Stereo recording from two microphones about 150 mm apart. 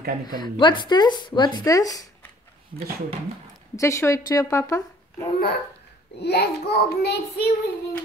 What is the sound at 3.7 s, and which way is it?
Speech, 20° left (ahead or behind).